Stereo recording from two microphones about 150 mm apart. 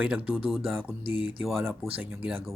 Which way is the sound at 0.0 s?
10° right (ahead or behind).